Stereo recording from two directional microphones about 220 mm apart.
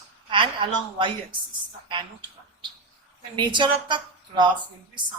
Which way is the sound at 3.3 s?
20° right (ahead or behind).